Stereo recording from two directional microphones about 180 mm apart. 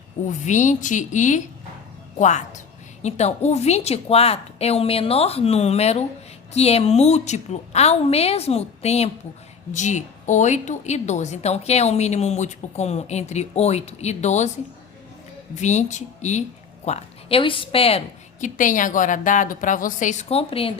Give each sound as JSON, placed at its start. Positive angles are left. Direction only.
{"t": 0.4, "sound": "a woman's voice", "side_deg": 45}
{"t": 15.5, "sound": "a woman's voice", "side_deg": 40}